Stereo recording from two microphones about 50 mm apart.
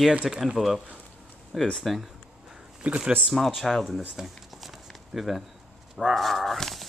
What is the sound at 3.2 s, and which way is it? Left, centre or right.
Speech, centre.